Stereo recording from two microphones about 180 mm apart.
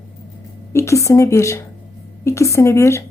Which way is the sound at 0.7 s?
15° left (ahead or behind).